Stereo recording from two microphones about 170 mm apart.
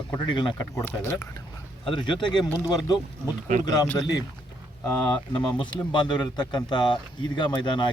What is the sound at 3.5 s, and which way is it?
Speech, 45° right (ahead or behind).